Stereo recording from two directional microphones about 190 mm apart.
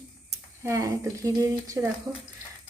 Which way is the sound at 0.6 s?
15° right (ahead or behind).